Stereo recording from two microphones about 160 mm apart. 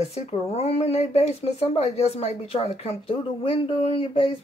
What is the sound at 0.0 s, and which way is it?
Speech, 40° left (ahead or behind).